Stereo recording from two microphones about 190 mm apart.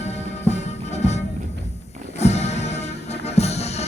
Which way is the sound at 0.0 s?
35° left (ahead or behind).